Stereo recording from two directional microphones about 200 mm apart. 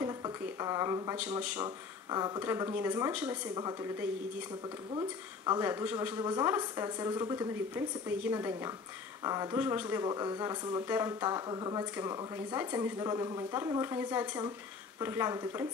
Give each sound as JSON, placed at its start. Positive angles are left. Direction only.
{"t": 0.0, "sound": "speech", "side_deg": -15}
{"t": 1.6, "sound": "a woman's voice", "side_deg": -20}
{"t": 4.9, "sound": "a woman's voice", "side_deg": -20}